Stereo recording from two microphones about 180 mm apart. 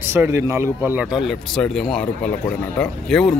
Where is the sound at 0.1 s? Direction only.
15° right (ahead or behind).